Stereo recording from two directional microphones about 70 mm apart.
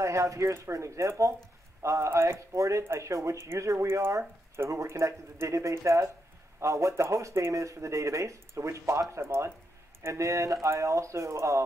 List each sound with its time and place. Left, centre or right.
0.0 s speech: right